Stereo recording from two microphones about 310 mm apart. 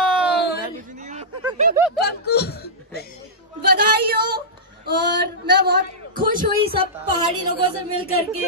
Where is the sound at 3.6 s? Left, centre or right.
Right.